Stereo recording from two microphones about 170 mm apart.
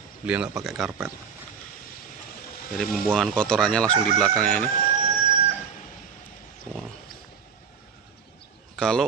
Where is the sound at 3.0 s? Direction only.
Centre (ahead or behind).